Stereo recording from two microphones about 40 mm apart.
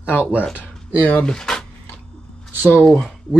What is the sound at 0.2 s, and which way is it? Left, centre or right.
Speech, right.